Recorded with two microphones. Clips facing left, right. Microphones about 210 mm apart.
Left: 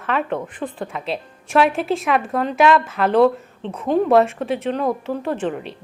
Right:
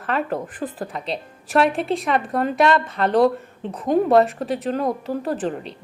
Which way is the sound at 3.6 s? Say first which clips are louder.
Left 1 dB; 15° right (ahead or behind).